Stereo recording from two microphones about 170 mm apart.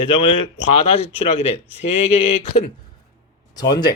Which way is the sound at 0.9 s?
40° left (ahead or behind).